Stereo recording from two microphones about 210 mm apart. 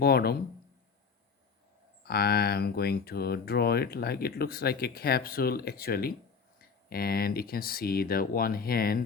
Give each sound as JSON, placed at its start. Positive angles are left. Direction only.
{"t": 0.0, "sound": "speech", "side_deg": 45}
{"t": 2.0, "sound": "speech", "side_deg": 50}